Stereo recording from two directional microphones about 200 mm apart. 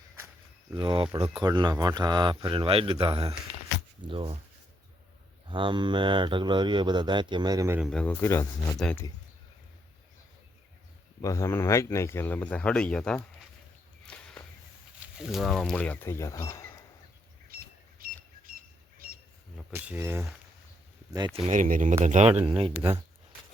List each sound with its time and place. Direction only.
0.7 s speech: 25° right (ahead or behind)
5.5 s speech: 25° right (ahead or behind)
7.8 s speech: 5° left (ahead or behind)
11.2 s speech: 15° left (ahead or behind)
14.0 s a sound: 5° left (ahead or behind)
15.0 s speech: centre (ahead or behind); by 16.6 s 15° left (ahead or behind)
17.5 s a sound: 45° right (ahead or behind)
19.7 s speech: 10° right (ahead or behind)
21.3 s speech: 35° right (ahead or behind)